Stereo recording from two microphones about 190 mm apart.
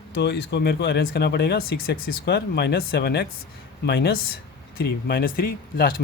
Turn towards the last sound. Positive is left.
turn(degrees=50)  # may be behind; listen again after turning